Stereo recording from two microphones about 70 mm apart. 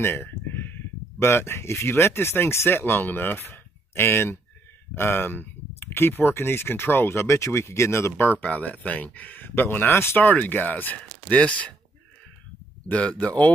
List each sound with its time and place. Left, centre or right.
0.0 s speech: left
10.2 s speech: left
12.8 s speech: centre